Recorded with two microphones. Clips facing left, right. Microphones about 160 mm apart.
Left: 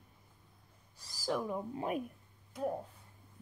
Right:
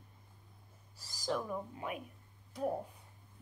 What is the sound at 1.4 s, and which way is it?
Speech, 15° left (ahead or behind).